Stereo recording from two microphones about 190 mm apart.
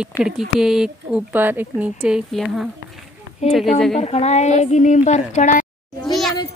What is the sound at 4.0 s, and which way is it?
A woman's voice, 35° left (ahead or behind).